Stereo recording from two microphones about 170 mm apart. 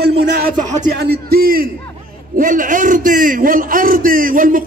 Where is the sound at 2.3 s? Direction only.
50° right (ahead or behind).